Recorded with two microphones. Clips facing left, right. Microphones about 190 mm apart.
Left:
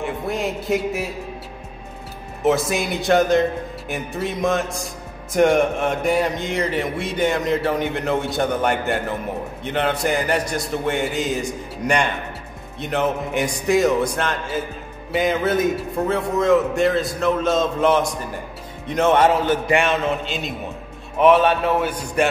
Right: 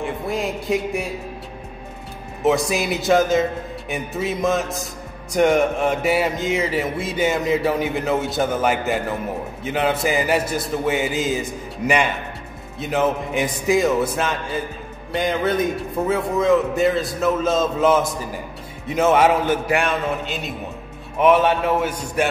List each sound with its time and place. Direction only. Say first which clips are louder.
0.0 s speech: even; centre (ahead or behind)
2.4 s mantra: even; centre (ahead or behind)
18.9 s a man's voice: even; 5° right (ahead or behind)
21.2 s a man's voice: left 1 dB; 10° right (ahead or behind)